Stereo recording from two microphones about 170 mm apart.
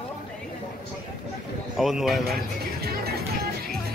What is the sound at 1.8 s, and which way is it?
Speech, centre (ahead or behind).